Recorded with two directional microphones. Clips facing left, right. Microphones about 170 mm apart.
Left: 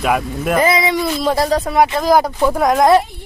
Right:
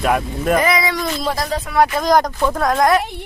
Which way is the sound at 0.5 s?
25° left (ahead or behind).